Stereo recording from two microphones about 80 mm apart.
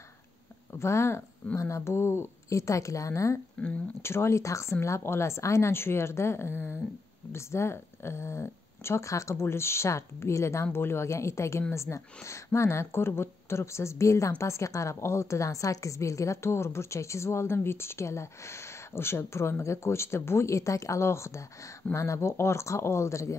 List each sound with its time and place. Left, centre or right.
0.7 s a woman's voice: left
3.6 s speech: centre
4.0 s a woman's voice: left